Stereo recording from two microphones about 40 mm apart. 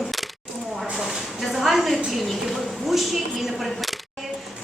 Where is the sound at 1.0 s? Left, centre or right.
Centre.